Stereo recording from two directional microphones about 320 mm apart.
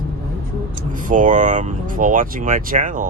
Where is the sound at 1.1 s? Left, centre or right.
Right.